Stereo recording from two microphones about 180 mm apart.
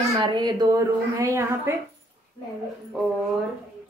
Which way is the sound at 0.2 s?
25° right (ahead or behind).